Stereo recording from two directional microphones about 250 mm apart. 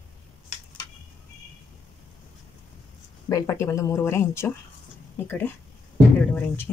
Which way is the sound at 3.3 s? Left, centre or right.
Centre.